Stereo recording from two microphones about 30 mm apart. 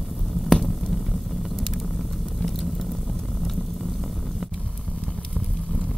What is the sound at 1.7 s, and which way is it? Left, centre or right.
Vehicle, centre.